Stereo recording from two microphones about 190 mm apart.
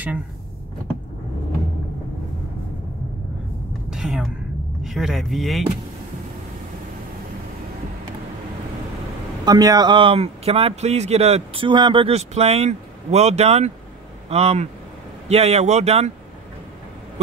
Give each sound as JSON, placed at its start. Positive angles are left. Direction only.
{"t": 3.9, "sound": "a sound", "side_deg": 0}
{"t": 4.8, "sound": "speech", "side_deg": 0}
{"t": 9.4, "sound": "speech", "side_deg": -20}